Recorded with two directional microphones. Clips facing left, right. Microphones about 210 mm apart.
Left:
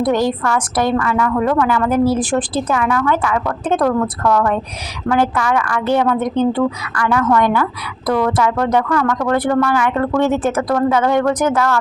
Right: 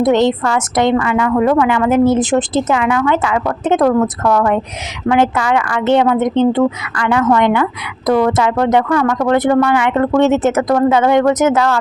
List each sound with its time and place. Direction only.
0.0 s a woman's voice: 25° right (ahead or behind)